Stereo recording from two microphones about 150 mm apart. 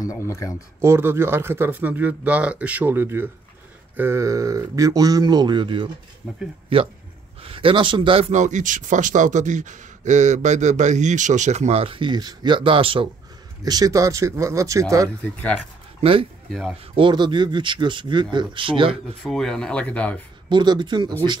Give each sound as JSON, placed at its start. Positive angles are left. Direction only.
{"t": 0.2, "sound": "speech", "side_deg": 20}
{"t": 0.7, "sound": "speech", "side_deg": -15}
{"t": 8.3, "sound": "speech", "side_deg": -55}
{"t": 13.7, "sound": "speech", "side_deg": -25}
{"t": 15.2, "sound": "speech", "side_deg": 10}
{"t": 16.0, "sound": "speech", "side_deg": -40}
{"t": 16.4, "sound": "speech", "side_deg": 0}
{"t": 16.9, "sound": "speech", "side_deg": -30}
{"t": 19.2, "sound": "speech", "side_deg": 5}
{"t": 20.4, "sound": "speech", "side_deg": -30}